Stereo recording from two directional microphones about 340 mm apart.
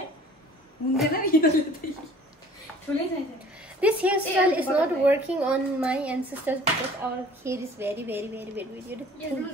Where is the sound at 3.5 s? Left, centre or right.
Centre.